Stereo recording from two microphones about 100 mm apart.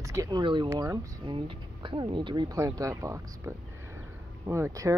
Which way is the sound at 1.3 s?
55° right (ahead or behind).